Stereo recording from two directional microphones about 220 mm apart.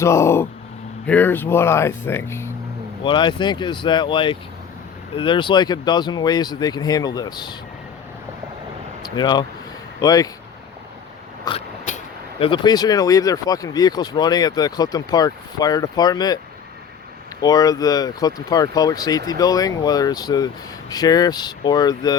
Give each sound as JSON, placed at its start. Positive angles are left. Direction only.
{"t": 0.0, "sound": "speech", "side_deg": 10}
{"t": 9.0, "sound": "speech", "side_deg": 20}
{"t": 11.4, "sound": "a sound", "side_deg": 25}
{"t": 12.4, "sound": "speech", "side_deg": 20}
{"t": 17.4, "sound": "speech", "side_deg": 15}